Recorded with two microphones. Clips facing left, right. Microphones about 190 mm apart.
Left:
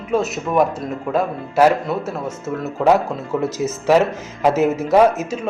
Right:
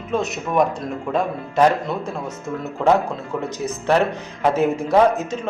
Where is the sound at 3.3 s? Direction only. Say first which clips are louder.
Left 6 dB; 20° left (ahead or behind).